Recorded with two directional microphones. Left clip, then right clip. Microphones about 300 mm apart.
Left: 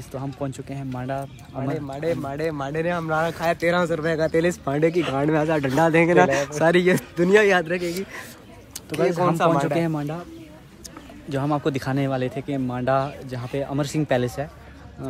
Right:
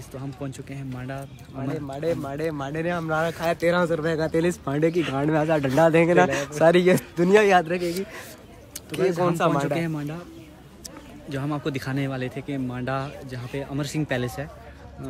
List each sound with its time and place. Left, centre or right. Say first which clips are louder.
0.1 s speech: left 5 dB; centre
7.8 s speech: even; centre
11.2 s speech: left 5 dB; centre